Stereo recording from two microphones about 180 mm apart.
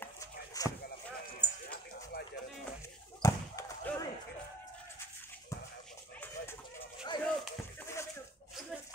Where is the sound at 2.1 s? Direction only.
55° left (ahead or behind).